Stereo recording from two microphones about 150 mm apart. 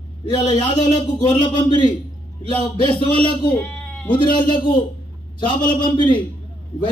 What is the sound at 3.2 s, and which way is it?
Speech, 35° left (ahead or behind).